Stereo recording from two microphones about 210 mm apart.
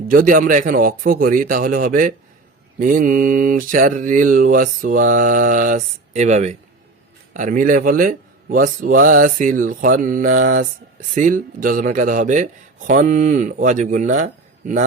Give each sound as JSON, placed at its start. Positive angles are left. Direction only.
{"t": 0.1, "sound": "mantra", "side_deg": -40}